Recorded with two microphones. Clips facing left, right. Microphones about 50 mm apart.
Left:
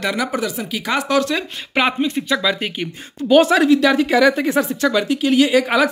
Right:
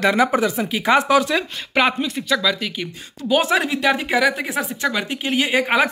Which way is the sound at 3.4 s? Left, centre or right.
Centre.